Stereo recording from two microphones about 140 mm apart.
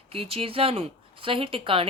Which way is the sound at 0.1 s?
45° right (ahead or behind).